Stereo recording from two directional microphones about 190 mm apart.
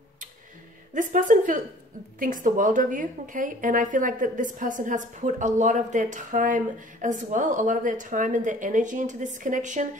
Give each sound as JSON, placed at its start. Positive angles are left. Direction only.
{"t": 0.9, "sound": "a woman's voice", "side_deg": -45}